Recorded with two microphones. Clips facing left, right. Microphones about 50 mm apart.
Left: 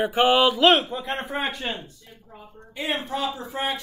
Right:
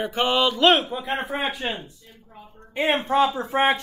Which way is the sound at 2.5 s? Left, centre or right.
Right.